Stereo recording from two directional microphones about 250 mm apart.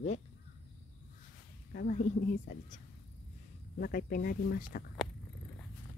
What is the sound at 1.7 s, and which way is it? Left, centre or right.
Speech, left.